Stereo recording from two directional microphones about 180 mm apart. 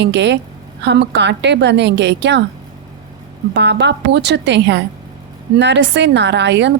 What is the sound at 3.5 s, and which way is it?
A woman's voice, 75° right (ahead or behind).